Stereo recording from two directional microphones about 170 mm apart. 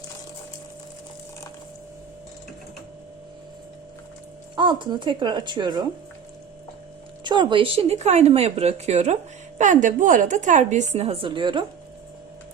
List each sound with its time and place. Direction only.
4.5 s speech: 25° right (ahead or behind)
7.3 s a woman's voice: 25° right (ahead or behind)